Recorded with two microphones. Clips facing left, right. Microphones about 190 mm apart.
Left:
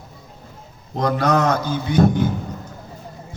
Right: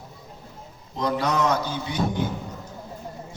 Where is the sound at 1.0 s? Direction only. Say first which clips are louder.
Left 5 dB; 50° left (ahead or behind).